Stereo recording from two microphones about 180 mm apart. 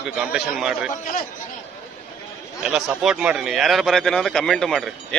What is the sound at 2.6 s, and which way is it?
A man's voice, 5° right (ahead or behind).